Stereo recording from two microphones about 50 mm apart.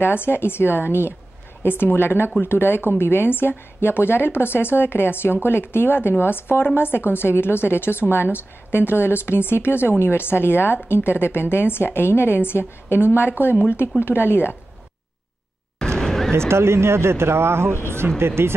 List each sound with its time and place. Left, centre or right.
0.0 s a woman's voice: left
15.8 s a sound: centre
16.3 s speech: right